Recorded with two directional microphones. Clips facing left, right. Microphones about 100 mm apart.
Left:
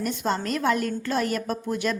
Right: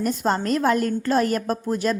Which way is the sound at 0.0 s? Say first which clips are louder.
Right 4 dB; 40° right (ahead or behind).